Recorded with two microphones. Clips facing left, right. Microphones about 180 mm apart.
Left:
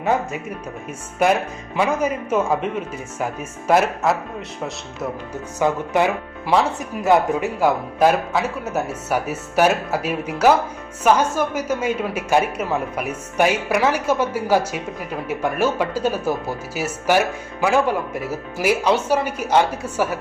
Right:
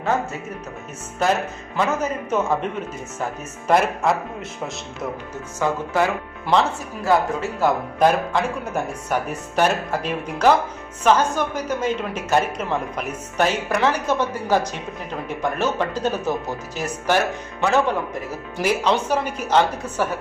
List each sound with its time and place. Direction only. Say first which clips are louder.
1.2 s speech: left 3 dB; 10° left (ahead or behind)
3.7 s speech: left 1 dB; 5° left (ahead or behind)
5.5 s speech: left 2 dB; 20° left (ahead or behind)
6.5 s speech: left 1 dB; centre (ahead or behind)
7.0 s speech: left 3 dB; 20° left (ahead or behind)